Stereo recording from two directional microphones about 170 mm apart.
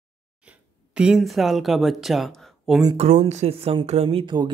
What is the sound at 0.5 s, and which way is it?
Speech, 5° right (ahead or behind).